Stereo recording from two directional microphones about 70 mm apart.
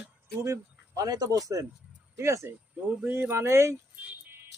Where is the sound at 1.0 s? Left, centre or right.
Right.